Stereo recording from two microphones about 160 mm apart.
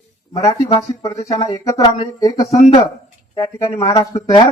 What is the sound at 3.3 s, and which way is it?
Speech, 25° left (ahead or behind).